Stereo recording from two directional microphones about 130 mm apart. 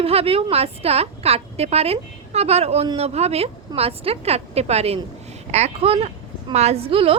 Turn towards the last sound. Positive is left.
turn(degrees=-45)  # may be behind; listen again after turning